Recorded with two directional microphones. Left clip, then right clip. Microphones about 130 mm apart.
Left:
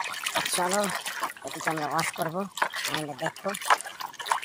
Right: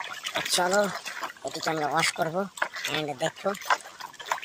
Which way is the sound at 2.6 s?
25° left (ahead or behind).